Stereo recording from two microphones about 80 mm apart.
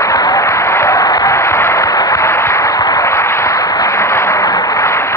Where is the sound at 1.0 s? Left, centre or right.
Left.